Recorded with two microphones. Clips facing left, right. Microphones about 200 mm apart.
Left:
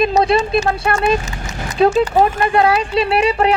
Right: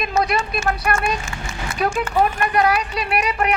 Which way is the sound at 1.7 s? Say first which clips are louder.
Left 7 dB; 25° left (ahead or behind).